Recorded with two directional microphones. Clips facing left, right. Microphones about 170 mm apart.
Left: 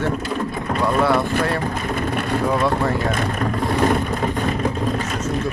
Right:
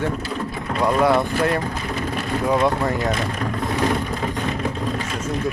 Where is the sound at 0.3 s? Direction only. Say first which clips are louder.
Left 3 dB; 50° left (ahead or behind).